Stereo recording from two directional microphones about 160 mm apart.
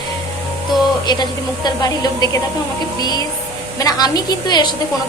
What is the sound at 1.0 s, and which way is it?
A woman's voice, 25° left (ahead or behind).